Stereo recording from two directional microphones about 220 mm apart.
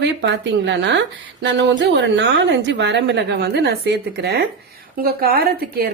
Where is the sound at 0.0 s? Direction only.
50° right (ahead or behind).